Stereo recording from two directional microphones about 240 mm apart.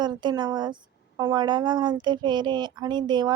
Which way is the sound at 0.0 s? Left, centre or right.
Centre.